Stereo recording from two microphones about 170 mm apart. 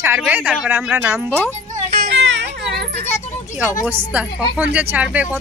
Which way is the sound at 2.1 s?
90° right.